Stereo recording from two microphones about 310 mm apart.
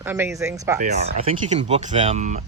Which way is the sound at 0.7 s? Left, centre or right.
Right.